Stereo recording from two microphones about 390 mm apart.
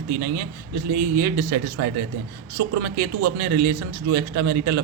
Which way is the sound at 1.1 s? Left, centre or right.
Right.